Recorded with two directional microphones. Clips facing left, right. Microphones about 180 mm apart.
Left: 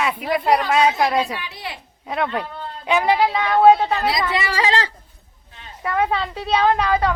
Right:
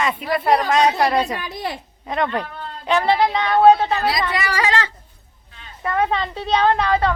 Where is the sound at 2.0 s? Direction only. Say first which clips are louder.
Right 1 dB; 5° left (ahead or behind).